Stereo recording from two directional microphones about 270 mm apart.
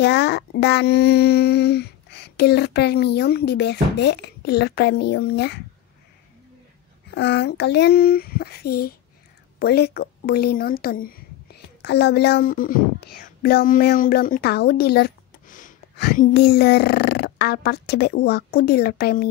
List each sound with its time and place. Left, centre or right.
0.0 s speech: left
7.2 s speech: left